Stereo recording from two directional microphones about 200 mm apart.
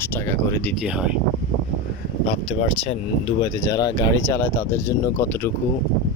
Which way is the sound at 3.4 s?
20° left (ahead or behind).